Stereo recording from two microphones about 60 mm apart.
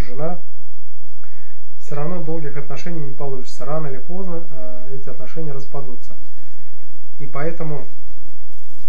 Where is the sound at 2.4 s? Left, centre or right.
Centre.